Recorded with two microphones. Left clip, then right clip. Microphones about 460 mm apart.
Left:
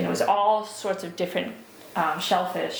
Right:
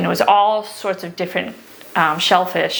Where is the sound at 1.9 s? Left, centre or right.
Right.